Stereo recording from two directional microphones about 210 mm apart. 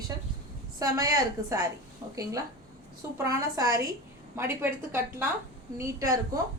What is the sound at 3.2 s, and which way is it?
A woman's voice, 15° right (ahead or behind).